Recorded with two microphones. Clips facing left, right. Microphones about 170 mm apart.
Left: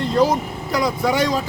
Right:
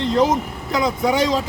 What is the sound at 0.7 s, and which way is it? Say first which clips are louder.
Speech: right 1 dB; 20° right (ahead or behind).